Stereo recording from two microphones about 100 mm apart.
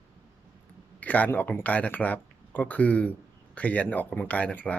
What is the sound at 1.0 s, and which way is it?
Speech, 15° left (ahead or behind).